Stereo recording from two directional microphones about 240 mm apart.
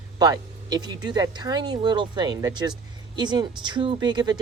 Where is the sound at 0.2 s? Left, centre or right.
Centre.